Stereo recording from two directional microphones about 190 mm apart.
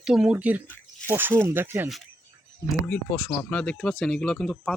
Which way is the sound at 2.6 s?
5° left (ahead or behind).